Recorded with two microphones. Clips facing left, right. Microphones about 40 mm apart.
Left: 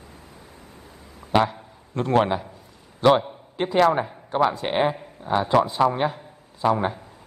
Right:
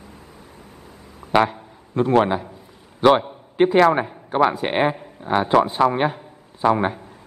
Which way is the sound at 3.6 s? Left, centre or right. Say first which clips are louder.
Right 4 dB; right.